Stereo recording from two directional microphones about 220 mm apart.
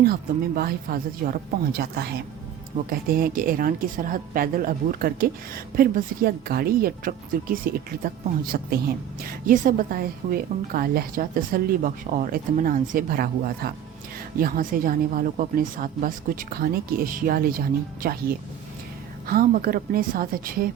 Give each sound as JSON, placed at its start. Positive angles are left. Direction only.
{"t": 0.0, "sound": "a woman's voice", "side_deg": -45}